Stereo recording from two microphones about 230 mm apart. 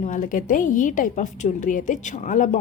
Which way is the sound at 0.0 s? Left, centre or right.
Left.